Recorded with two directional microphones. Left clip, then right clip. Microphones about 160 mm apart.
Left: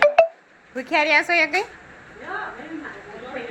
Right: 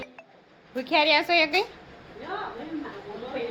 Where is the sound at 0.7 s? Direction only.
10° right (ahead or behind).